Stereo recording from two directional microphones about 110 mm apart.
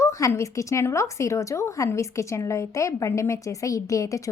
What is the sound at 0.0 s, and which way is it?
A woman's voice, 30° left (ahead or behind).